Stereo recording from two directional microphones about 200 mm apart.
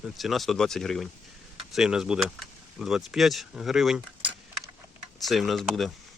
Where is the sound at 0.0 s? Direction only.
Centre (ahead or behind).